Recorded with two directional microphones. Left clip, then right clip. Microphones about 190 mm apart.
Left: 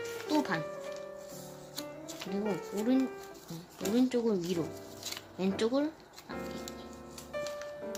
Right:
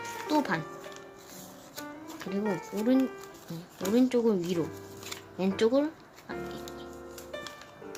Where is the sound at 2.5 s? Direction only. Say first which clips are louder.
Right 4 dB; 10° right (ahead or behind).